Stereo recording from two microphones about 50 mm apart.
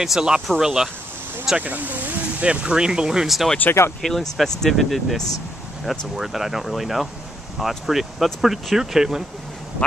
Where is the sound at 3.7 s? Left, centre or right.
Left.